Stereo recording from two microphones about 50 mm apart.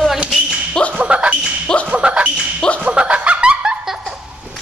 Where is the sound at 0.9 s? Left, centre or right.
Right.